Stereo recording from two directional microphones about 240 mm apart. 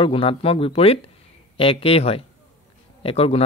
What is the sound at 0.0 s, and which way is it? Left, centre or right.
A man's voice, left.